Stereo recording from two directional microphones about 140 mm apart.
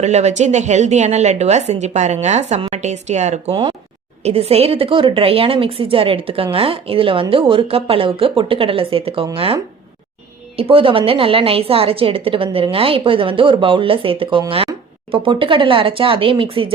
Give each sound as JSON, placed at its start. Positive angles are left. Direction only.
{"t": 0.0, "sound": "a woman's voice", "side_deg": -55}
{"t": 10.6, "sound": "speech", "side_deg": -40}